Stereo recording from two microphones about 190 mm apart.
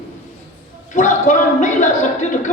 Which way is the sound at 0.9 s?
40° left (ahead or behind).